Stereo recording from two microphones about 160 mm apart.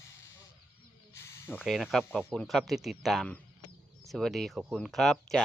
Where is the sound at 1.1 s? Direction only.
15° left (ahead or behind).